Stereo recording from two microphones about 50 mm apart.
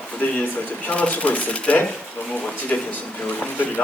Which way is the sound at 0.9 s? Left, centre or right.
Left.